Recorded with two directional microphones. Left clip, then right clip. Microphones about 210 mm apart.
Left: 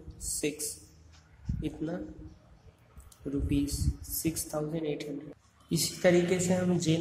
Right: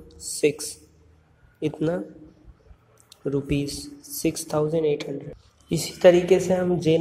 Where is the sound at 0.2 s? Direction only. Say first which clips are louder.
Right 11 dB; 15° right (ahead or behind).